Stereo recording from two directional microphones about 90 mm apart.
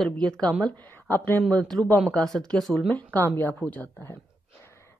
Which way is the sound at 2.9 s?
20° left (ahead or behind).